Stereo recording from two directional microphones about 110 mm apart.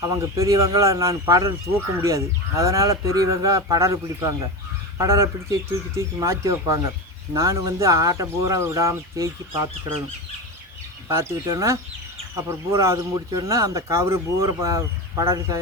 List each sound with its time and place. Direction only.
0.0 s speech: 25° right (ahead or behind)
11.1 s speech: 25° right (ahead or behind)